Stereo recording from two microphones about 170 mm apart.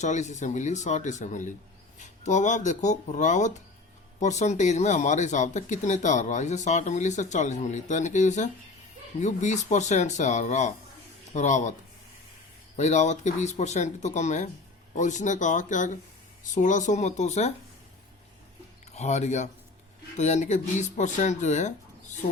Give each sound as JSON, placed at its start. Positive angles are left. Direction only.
{"t": 0.0, "sound": "speech", "side_deg": 45}
{"t": 12.7, "sound": "speech", "side_deg": 45}
{"t": 18.9, "sound": "speech", "side_deg": 40}
{"t": 22.2, "sound": "speech", "side_deg": 55}